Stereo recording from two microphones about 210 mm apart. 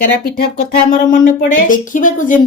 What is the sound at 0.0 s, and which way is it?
Speech, 45° left (ahead or behind).